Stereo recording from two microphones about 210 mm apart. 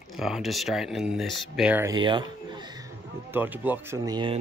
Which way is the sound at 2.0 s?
20° right (ahead or behind).